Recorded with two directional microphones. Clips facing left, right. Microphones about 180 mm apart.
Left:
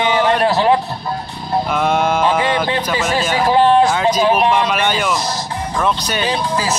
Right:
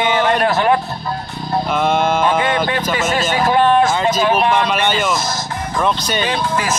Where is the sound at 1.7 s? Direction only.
5° left (ahead or behind).